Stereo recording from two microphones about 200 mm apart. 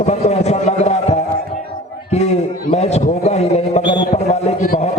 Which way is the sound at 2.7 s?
35° left (ahead or behind).